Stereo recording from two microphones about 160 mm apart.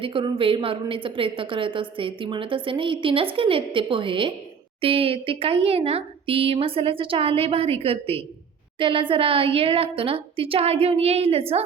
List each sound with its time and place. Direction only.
0.0 s speech: 35° right (ahead or behind)